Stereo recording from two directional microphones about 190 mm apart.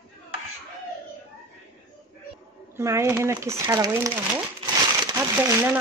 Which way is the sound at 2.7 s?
15° right (ahead or behind).